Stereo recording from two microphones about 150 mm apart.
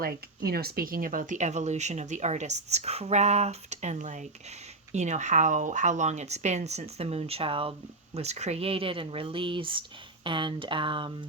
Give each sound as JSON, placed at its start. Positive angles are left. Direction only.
{"t": 0.0, "sound": "speech", "side_deg": -90}